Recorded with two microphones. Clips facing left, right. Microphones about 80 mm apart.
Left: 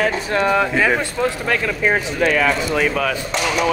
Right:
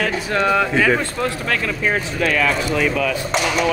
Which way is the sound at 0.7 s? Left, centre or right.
Centre.